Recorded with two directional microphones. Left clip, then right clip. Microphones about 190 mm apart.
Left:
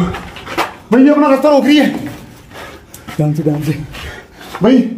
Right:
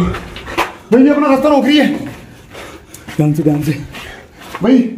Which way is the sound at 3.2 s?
25° right (ahead or behind).